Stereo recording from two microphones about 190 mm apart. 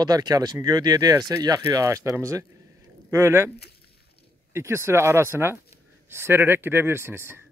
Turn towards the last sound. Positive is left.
turn(degrees=-15)  # may be behind; listen again after turning